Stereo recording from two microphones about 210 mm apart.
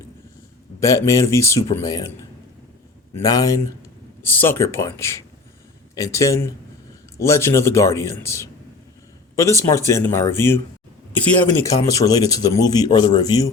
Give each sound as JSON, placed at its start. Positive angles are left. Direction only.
{"t": 0.8, "sound": "a man's voice", "side_deg": 15}
{"t": 3.2, "sound": "a man's voice", "side_deg": 15}